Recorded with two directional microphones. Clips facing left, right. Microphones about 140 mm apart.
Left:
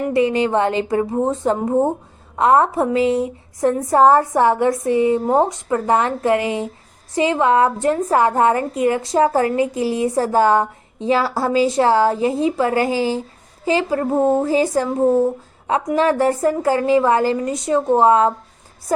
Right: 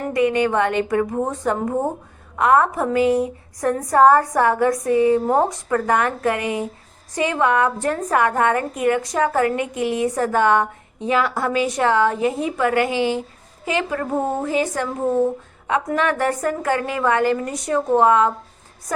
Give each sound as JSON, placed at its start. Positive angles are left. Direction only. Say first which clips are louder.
{"t": 0.1, "sound": "a woman's voice", "louder": "even", "side_deg": 30}